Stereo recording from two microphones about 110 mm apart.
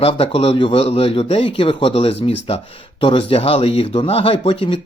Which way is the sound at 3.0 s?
50° left (ahead or behind).